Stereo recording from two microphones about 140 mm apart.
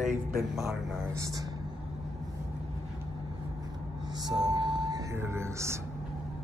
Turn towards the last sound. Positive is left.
turn(degrees=-20)  # may be behind; listen again after turning